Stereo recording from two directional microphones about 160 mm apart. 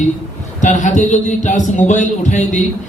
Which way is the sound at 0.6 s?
50° left (ahead or behind).